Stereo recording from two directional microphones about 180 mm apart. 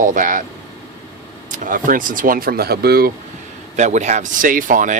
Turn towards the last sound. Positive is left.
turn(degrees=-45)  # may be behind; listen again after turning